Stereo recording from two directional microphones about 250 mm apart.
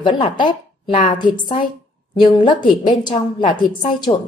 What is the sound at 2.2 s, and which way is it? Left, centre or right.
A woman's voice, centre.